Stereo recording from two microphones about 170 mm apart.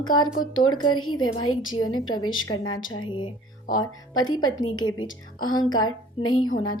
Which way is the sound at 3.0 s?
25° left (ahead or behind).